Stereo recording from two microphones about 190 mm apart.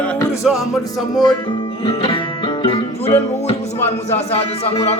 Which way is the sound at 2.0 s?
25° left (ahead or behind).